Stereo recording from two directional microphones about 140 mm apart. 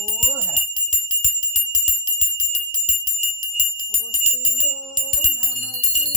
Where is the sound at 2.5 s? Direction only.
60° left (ahead or behind).